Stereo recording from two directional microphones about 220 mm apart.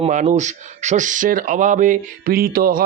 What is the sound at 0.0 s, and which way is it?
Speech, 35° right (ahead or behind).